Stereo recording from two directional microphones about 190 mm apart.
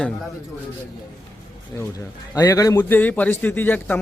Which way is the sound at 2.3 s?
20° left (ahead or behind).